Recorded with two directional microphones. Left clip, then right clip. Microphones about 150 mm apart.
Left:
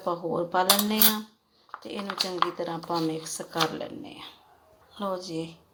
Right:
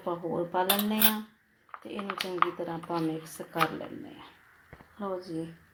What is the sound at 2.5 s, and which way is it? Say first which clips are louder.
Speech: left 4 dB; 10° left (ahead or behind).